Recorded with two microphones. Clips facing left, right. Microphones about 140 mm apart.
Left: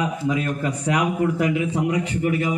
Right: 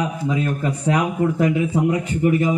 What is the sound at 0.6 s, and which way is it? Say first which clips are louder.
A man's voice: right 2 dB; 30° right (ahead or behind).